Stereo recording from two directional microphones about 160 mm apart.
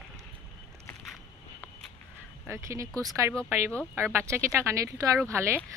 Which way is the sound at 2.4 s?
15° right (ahead or behind).